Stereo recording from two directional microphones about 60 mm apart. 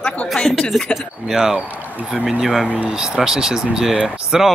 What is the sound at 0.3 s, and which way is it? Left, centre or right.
Speech, centre.